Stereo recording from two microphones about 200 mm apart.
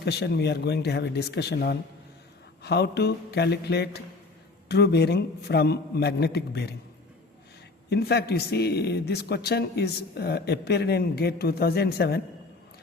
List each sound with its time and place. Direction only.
0.0 s a man's voice: 55° left (ahead or behind)
7.9 s a man's voice: 55° left (ahead or behind)